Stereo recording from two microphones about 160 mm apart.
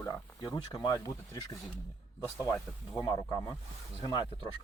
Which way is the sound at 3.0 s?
25° left (ahead or behind).